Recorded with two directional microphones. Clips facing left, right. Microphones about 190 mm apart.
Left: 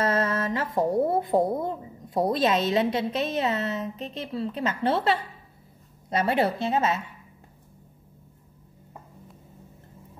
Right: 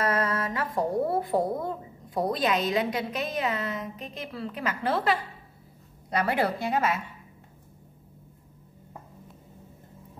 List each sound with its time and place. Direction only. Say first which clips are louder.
0.0 s speech: left 2 dB; 25° left (ahead or behind)